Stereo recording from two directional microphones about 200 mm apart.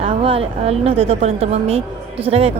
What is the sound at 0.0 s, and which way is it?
A woman's voice, 30° right (ahead or behind).